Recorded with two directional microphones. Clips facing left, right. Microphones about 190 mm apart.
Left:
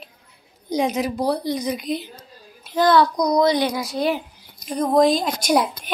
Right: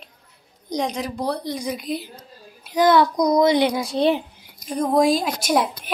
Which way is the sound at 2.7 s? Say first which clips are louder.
Even; 20° right (ahead or behind).